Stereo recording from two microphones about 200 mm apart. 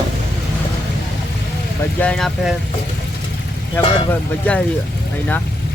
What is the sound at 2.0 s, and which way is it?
Speech, 5° left (ahead or behind).